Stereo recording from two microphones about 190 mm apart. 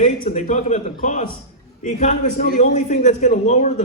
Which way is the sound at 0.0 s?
40° left (ahead or behind).